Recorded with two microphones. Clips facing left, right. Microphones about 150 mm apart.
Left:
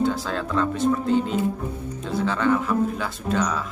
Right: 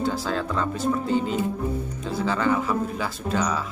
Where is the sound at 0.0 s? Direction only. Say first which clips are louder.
Left 2 dB; centre (ahead or behind).